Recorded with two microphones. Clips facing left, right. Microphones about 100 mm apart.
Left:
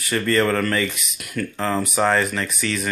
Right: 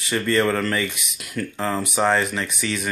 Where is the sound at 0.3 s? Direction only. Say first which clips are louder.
Left 1 dB; 15° right (ahead or behind).